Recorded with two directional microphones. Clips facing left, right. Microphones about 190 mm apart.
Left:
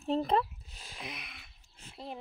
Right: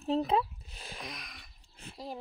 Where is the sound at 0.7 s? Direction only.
60° right (ahead or behind).